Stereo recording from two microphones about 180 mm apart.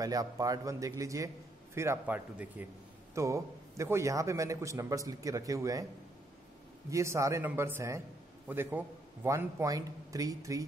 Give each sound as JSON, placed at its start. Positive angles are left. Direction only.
{"t": 0.0, "sound": "a man's voice", "side_deg": -20}
{"t": 6.9, "sound": "a man's voice", "side_deg": -15}